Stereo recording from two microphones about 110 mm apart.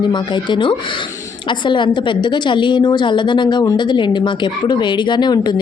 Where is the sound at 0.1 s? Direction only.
45° left (ahead or behind).